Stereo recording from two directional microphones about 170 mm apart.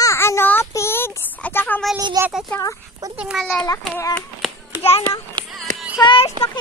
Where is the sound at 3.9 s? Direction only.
10° left (ahead or behind).